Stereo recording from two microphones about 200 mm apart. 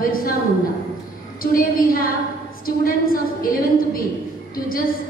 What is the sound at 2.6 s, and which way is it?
A woman's voice, 45° left (ahead or behind).